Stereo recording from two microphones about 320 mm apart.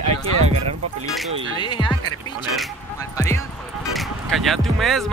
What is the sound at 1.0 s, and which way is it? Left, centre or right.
Speech, centre.